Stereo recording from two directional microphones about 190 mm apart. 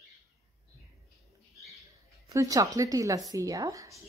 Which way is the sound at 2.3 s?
15° right (ahead or behind).